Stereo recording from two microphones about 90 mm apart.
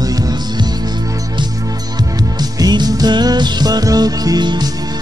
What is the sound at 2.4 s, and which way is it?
Music, 50° right (ahead or behind).